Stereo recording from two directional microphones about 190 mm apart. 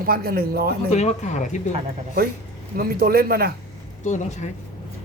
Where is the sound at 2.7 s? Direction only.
50° right (ahead or behind).